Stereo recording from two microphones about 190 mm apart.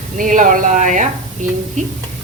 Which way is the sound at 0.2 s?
45° right (ahead or behind).